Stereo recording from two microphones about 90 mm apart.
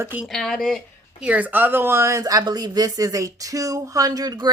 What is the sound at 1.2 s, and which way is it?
Speech, 15° right (ahead or behind).